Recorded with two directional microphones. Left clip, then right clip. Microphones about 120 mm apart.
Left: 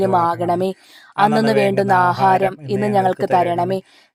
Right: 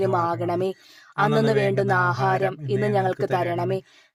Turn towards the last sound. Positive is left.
turn(degrees=35)  # may be behind; listen again after turning